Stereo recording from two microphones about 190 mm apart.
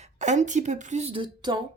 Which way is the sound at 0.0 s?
40° right (ahead or behind).